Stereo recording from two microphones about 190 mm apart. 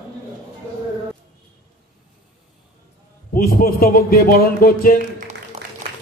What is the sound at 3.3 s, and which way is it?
A man's voice, 50° left (ahead or behind).